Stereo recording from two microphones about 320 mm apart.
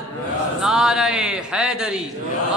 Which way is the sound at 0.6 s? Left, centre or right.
Centre.